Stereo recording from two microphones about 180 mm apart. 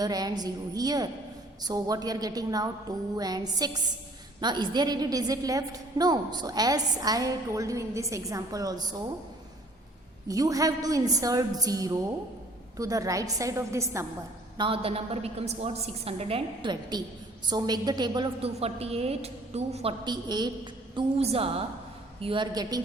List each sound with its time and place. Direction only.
0.0 s a woman's voice: 20° right (ahead or behind)
10.2 s a woman's voice: 20° right (ahead or behind)
14.6 s a woman's voice: 30° right (ahead or behind)